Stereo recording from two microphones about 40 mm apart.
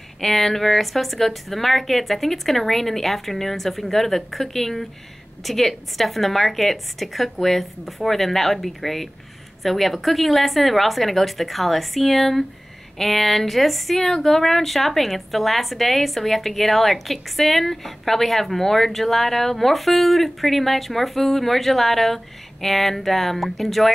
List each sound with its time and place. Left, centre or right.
0.2 s a woman's voice: centre